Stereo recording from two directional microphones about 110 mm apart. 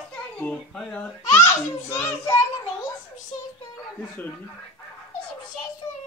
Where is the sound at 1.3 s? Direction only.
20° left (ahead or behind).